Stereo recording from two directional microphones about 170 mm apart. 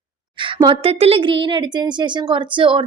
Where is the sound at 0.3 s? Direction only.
30° right (ahead or behind).